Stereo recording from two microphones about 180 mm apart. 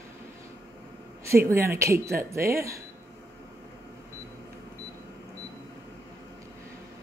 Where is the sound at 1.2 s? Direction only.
15° right (ahead or behind).